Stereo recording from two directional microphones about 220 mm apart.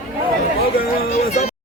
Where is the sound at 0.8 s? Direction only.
35° left (ahead or behind).